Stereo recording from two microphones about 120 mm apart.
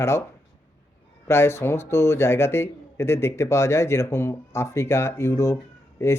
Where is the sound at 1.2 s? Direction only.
20° left (ahead or behind).